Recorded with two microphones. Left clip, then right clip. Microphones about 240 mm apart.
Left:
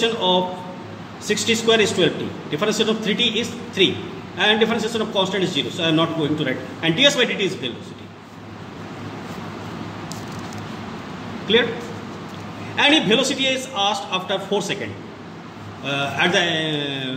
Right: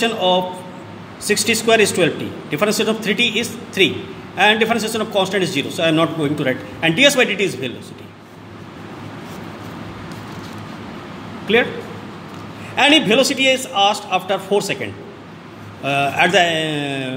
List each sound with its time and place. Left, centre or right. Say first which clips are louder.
0.0 s a man's voice: right 2 dB; right
12.7 s a man's voice: right 3 dB; right
15.9 s a man's voice: right 5 dB; right